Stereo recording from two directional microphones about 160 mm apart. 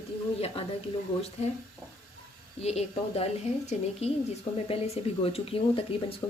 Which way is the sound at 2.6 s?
40° left (ahead or behind).